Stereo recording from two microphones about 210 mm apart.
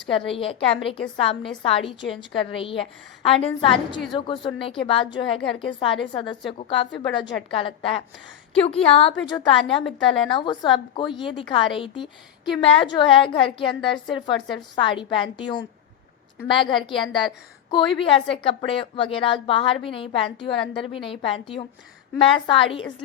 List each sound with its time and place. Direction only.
0.0 s a woman's voice: 25° left (ahead or behind)